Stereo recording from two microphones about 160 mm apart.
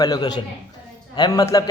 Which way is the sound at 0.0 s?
25° left (ahead or behind).